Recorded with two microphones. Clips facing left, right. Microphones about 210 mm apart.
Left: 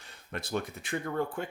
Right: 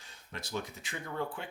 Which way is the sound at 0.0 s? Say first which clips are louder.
Left 6 dB; 60° left (ahead or behind).